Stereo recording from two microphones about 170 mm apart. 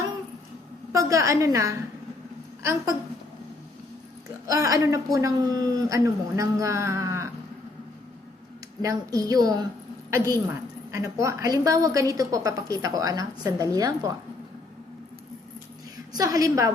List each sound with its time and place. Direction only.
0.9 s a woman's voice: 20° right (ahead or behind)
4.4 s a woman's voice: 20° right (ahead or behind)
8.8 s a woman's voice: 20° right (ahead or behind)
16.1 s a woman's voice: 20° right (ahead or behind)